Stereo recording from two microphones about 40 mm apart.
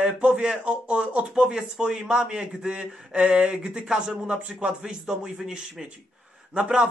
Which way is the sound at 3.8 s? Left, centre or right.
Centre.